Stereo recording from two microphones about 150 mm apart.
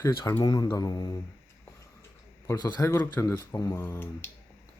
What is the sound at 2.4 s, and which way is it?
Speech, 25° left (ahead or behind).